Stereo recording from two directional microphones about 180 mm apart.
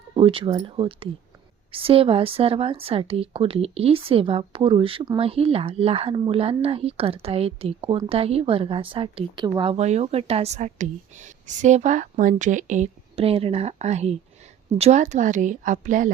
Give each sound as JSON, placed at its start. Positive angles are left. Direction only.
{"t": 0.1, "sound": "a woman's voice", "side_deg": -30}